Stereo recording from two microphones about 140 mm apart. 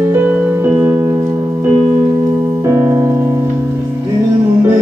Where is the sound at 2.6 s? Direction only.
20° right (ahead or behind).